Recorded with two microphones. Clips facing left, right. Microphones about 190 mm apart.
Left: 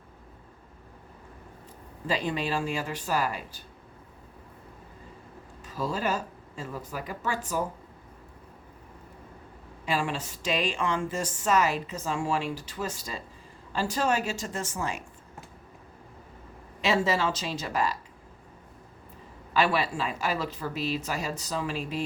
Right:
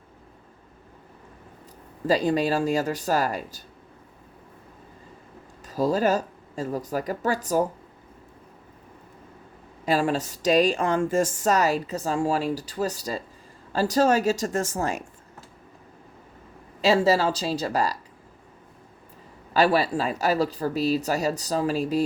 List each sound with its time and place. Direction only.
2.0 s speech: 40° right (ahead or behind)
5.6 s speech: 40° right (ahead or behind)
9.8 s speech: 40° right (ahead or behind)
16.8 s speech: 35° right (ahead or behind)
19.5 s speech: 35° right (ahead or behind)